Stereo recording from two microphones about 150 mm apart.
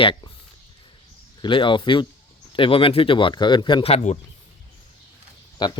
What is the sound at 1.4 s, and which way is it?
Speech, 35° left (ahead or behind).